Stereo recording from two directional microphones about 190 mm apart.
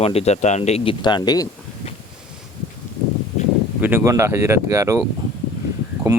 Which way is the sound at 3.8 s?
10° right (ahead or behind).